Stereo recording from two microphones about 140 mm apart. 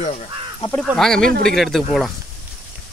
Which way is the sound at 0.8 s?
Centre (ahead or behind).